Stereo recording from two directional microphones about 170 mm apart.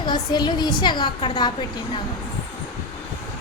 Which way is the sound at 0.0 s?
25° left (ahead or behind).